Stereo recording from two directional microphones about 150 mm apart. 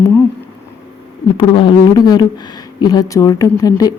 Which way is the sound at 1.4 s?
35° left (ahead or behind).